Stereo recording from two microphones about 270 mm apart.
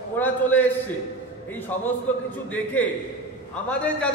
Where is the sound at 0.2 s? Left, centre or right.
Centre.